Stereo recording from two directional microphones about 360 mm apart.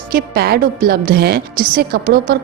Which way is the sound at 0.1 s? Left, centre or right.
Right.